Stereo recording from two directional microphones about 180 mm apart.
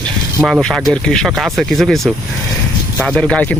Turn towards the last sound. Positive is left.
turn(degrees=5)  # may be behind; listen again after turning